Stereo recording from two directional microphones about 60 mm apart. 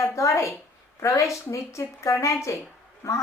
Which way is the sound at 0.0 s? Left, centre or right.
Left.